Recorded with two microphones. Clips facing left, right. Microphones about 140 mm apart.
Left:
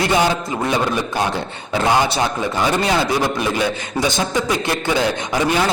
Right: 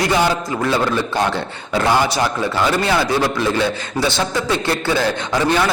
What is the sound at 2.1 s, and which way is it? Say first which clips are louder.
A man's voice: right 1 dB; 20° left (ahead or behind).